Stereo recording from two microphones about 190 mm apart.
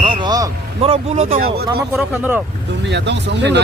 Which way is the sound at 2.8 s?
65° right (ahead or behind).